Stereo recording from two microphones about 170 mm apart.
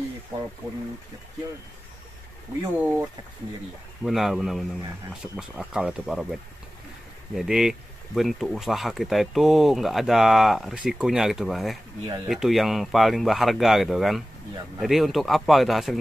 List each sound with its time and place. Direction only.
4.0 s speech: centre (ahead or behind)
7.3 s speech: centre (ahead or behind)